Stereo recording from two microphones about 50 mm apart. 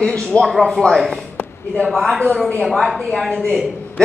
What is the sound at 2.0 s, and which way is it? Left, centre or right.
Speech, centre.